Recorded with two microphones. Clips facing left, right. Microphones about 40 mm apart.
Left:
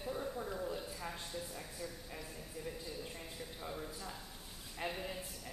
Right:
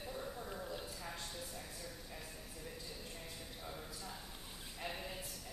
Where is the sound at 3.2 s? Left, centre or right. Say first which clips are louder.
Left 3 dB; centre.